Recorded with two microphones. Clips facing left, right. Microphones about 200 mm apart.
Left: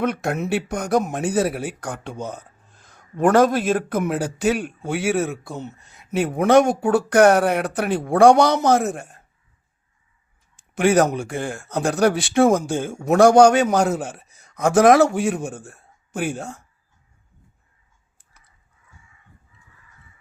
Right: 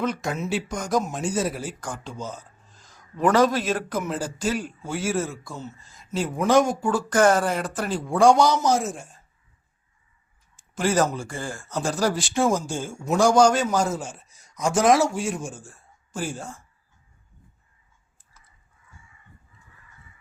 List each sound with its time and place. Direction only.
0.0 s speech: 60° left (ahead or behind)
10.8 s speech: 65° left (ahead or behind)